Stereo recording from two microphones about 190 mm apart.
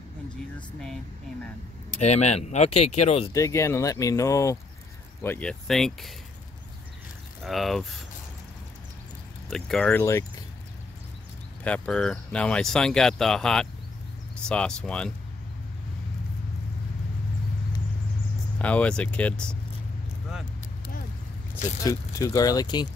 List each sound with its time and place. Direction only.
0.6 s speech: 5° left (ahead or behind)
2.0 s speech: 35° left (ahead or behind)
3.3 s speech: 15° left (ahead or behind)
7.4 s speech: centre (ahead or behind)
9.5 s speech: 5° left (ahead or behind)
11.6 s speech: 5° left (ahead or behind)
18.6 s speech: 5° left (ahead or behind)
21.8 s speech: 20° left (ahead or behind)